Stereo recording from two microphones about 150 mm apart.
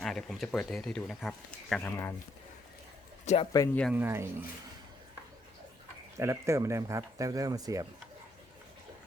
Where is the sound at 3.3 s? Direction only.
50° left (ahead or behind).